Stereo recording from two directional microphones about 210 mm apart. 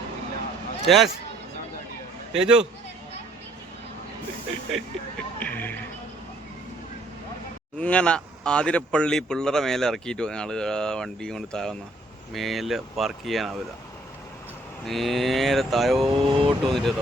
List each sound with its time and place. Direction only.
0.9 s speech: centre (ahead or behind)
2.3 s speech: 5° right (ahead or behind)
5.4 s music: 10° left (ahead or behind)
7.8 s speech: 5° left (ahead or behind)
14.8 s speech: centre (ahead or behind)
16.0 s speech: 25° right (ahead or behind)
16.6 s speech: centre (ahead or behind)